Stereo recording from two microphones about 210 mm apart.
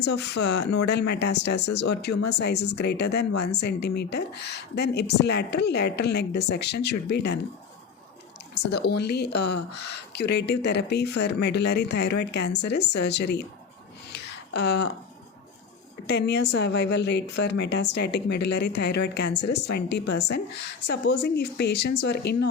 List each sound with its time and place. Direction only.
0.0 s speech: 55° left (ahead or behind)
8.5 s speech: 50° left (ahead or behind)
14.1 s a sound: 55° left (ahead or behind)
16.0 s speech: 55° left (ahead or behind)